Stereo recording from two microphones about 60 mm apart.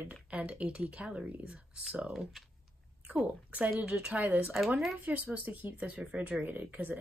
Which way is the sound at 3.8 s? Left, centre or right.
Centre.